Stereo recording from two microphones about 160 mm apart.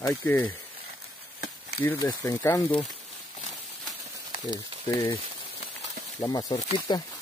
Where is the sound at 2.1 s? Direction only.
20° left (ahead or behind).